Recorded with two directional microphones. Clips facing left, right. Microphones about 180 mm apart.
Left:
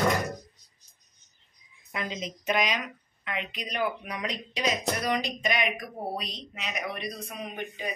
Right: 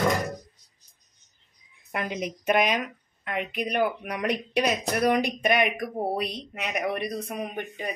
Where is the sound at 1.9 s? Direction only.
60° right (ahead or behind).